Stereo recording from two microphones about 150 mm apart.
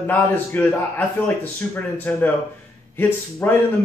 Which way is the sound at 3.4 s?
10° left (ahead or behind).